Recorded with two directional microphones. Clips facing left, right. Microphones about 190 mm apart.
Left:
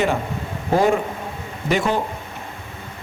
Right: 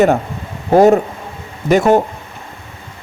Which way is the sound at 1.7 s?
45° right (ahead or behind).